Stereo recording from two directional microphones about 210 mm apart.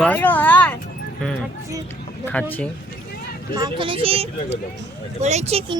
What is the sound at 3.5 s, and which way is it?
Speech, 20° right (ahead or behind).